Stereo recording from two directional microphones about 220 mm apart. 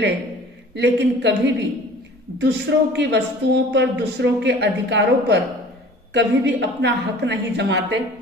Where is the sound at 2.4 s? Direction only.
50° right (ahead or behind).